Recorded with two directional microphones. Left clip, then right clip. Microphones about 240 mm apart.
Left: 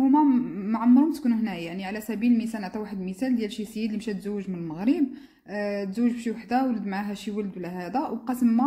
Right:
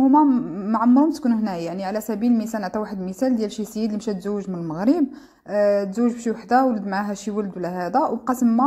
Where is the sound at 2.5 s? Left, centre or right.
Centre.